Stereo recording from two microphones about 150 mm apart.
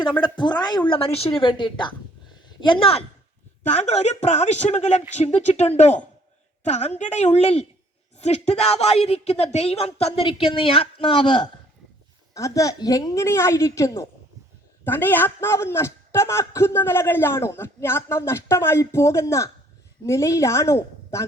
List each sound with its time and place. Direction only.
0.2 s a woman's voice: 30° left (ahead or behind)
3.6 s a woman's voice: 50° left (ahead or behind); by 11.4 s 35° left (ahead or behind)
12.3 s a woman's voice: 20° left (ahead or behind)